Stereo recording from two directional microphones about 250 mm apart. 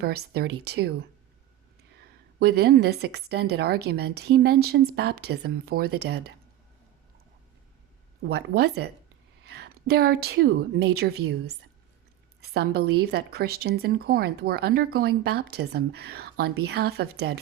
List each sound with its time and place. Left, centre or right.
0.0 s a woman's voice: right
2.4 s a woman's voice: right
8.2 s a woman's voice: right